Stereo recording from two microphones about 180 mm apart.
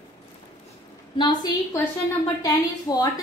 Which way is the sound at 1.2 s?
25° left (ahead or behind).